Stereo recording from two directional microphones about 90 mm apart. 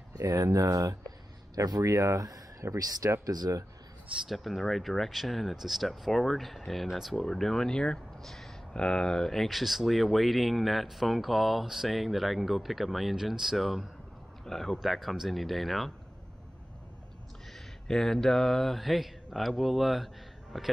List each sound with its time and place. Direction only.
0.2 s speech: 40° right (ahead or behind)
4.1 s speech: centre (ahead or behind)
17.5 s mantra: 5° left (ahead or behind)
20.5 s speech: centre (ahead or behind)